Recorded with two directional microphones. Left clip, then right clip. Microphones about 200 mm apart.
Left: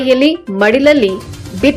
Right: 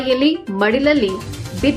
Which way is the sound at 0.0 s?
15° left (ahead or behind).